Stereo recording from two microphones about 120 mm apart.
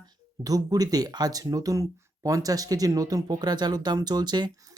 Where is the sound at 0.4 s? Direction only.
30° right (ahead or behind).